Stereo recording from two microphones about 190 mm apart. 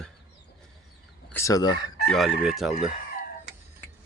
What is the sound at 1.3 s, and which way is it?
Speech, 15° left (ahead or behind).